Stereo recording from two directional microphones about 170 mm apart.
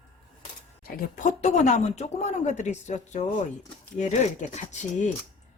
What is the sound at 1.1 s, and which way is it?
Speech, 45° left (ahead or behind).